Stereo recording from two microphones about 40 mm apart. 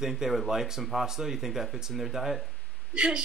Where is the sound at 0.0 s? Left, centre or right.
Centre.